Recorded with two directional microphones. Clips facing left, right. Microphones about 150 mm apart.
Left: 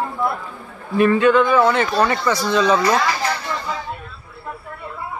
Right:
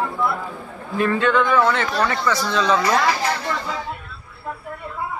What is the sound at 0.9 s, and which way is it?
A man's voice, 15° left (ahead or behind).